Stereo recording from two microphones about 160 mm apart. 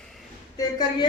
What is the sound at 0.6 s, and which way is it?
Speech, 25° left (ahead or behind).